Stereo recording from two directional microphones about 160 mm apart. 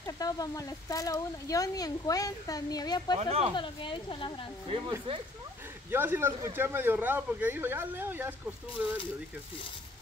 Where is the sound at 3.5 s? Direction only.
30° left (ahead or behind).